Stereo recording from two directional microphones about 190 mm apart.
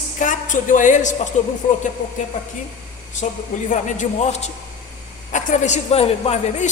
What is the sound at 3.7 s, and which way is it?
A woman's voice, 40° left (ahead or behind).